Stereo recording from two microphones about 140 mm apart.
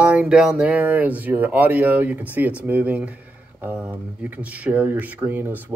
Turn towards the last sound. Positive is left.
turn(degrees=-15)  # may be behind; listen again after turning